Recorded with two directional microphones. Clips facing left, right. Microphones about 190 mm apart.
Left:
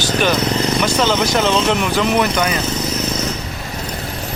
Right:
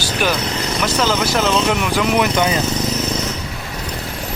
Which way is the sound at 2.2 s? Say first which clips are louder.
Right 1 dB; 20° right (ahead or behind).